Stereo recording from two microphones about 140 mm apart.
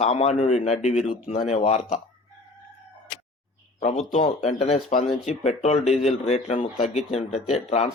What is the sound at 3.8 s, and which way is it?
Speech, 50° left (ahead or behind).